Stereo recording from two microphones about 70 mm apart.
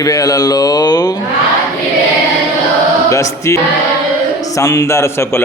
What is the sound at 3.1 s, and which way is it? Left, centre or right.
A man's voice, left.